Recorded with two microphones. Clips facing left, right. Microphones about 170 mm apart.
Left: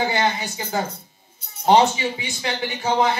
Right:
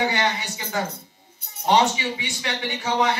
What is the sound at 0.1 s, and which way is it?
Speech, 35° left (ahead or behind).